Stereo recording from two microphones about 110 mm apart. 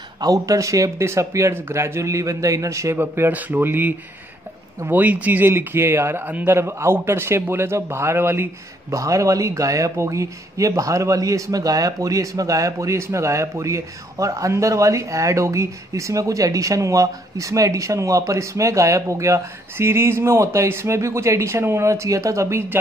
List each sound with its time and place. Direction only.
0.2 s speech: 30° right (ahead or behind)